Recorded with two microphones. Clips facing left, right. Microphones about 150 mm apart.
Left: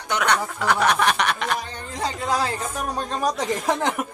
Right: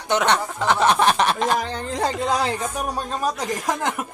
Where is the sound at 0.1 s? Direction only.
25° right (ahead or behind).